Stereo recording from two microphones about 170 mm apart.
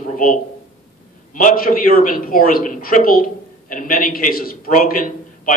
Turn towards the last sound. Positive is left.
turn(degrees=55)  # may be behind; listen again after turning